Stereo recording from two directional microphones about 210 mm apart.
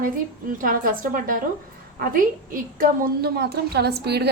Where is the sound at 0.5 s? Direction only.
40° right (ahead or behind).